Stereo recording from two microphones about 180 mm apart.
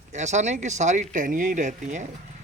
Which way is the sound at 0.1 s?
40° right (ahead or behind).